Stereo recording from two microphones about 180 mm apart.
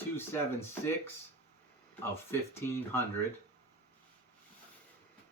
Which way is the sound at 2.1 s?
15° left (ahead or behind).